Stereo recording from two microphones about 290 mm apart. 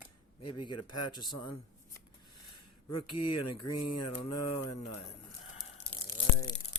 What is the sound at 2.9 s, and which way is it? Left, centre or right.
Mantra, left.